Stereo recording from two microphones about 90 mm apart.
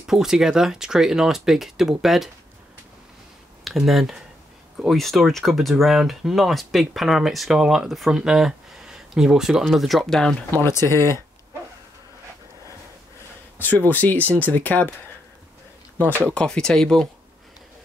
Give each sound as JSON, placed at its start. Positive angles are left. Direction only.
{"t": 0.0, "sound": "speech", "side_deg": -5}
{"t": 3.6, "sound": "speech", "side_deg": 0}
{"t": 10.6, "sound": "speech", "side_deg": 30}
{"t": 13.6, "sound": "speech", "side_deg": 20}
{"t": 16.3, "sound": "speech", "side_deg": 10}